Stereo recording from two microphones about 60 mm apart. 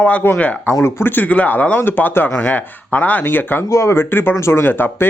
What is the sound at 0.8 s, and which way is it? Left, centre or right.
Speech, left.